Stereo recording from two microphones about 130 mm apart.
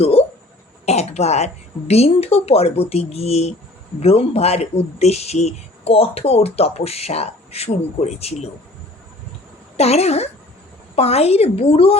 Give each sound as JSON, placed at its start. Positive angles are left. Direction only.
{"t": 0.0, "sound": "a sound", "side_deg": 50}
{"t": 1.9, "sound": "speech", "side_deg": 50}
{"t": 9.7, "sound": "speech", "side_deg": 55}